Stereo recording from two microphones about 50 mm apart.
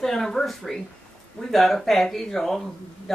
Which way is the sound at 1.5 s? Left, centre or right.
Centre.